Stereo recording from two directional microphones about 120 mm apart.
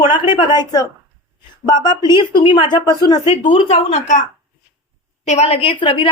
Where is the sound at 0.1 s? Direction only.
45° left (ahead or behind).